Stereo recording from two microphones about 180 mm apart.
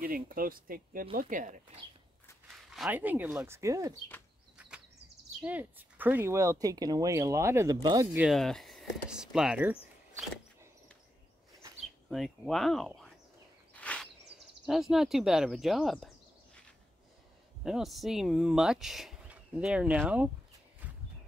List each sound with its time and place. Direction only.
0.0 s speech: 50° right (ahead or behind)
2.7 s speech: 5° right (ahead or behind)
4.6 s a sound: 5° right (ahead or behind)
5.4 s speech: 10° right (ahead or behind)
8.3 s speech: centre (ahead or behind)
12.1 s speech: centre (ahead or behind)
13.7 s a sound: 5° left (ahead or behind)
14.7 s speech: centre (ahead or behind)
17.6 s speech: centre (ahead or behind)
20.8 s a sound: 10° right (ahead or behind)